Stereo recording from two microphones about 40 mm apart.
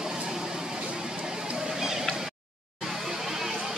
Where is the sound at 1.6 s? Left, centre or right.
Centre.